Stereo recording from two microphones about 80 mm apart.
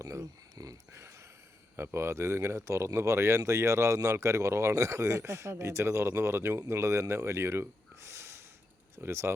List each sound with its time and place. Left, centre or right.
0.0 s speech: right
1.7 s speech: right